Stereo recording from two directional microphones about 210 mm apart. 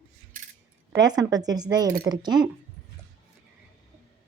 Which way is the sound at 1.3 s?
20° right (ahead or behind).